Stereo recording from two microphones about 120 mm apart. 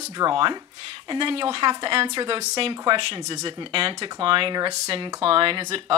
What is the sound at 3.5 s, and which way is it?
Speech, 45° right (ahead or behind).